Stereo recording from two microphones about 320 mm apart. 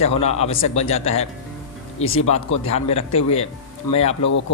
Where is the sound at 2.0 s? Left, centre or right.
Left.